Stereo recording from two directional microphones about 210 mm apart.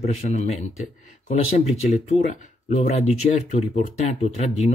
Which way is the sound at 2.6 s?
35° left (ahead or behind).